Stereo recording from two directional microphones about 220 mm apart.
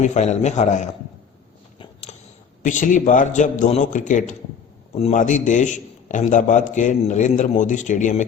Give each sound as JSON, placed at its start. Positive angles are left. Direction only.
{"t": 0.0, "sound": "a man's voice", "side_deg": 30}
{"t": 1.8, "sound": "a sound", "side_deg": 30}
{"t": 2.6, "sound": "a man's voice", "side_deg": 35}